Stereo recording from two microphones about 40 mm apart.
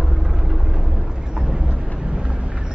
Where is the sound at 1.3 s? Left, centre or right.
Right.